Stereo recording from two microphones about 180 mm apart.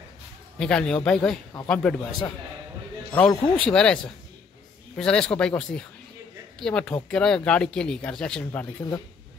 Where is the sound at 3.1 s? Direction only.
10° left (ahead or behind).